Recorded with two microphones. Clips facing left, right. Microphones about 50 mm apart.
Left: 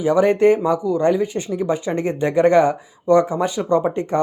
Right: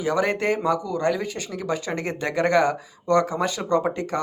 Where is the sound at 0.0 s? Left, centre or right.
Centre.